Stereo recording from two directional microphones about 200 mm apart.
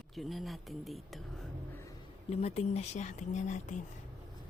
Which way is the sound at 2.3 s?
30° left (ahead or behind).